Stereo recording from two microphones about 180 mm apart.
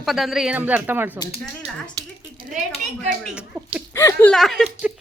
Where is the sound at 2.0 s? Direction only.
20° right (ahead or behind).